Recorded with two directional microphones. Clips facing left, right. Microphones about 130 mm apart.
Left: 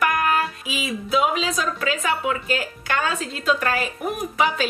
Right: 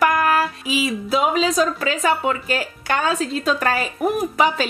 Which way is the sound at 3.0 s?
35° right (ahead or behind).